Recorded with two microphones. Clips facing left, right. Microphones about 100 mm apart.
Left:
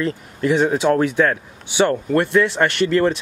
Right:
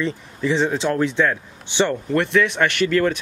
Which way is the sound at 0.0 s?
5° left (ahead or behind).